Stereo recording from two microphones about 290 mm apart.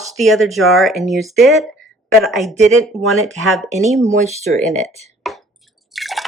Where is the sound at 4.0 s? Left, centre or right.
Right.